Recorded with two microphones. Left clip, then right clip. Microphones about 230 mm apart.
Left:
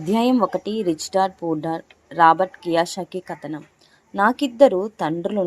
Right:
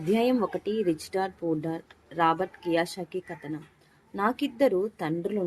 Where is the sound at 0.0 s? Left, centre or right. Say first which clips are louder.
Left 6 dB; centre.